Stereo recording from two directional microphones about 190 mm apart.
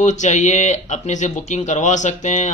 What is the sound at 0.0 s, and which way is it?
Speech, 40° left (ahead or behind).